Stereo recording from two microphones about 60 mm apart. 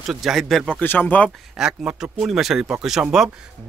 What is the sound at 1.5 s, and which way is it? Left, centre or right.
A man's voice, centre.